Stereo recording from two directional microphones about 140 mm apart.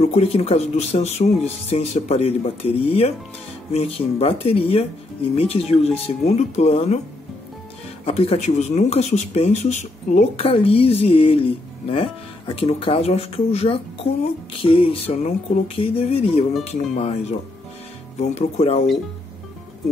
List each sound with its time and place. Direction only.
0.0 s speech: 50° left (ahead or behind)
8.0 s speech: 45° left (ahead or behind)
10.3 s speech: 40° left (ahead or behind)